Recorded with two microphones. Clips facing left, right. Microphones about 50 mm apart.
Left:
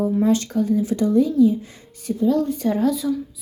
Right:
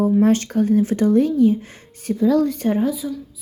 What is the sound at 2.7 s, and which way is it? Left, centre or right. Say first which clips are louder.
Speech: left 1 dB; centre.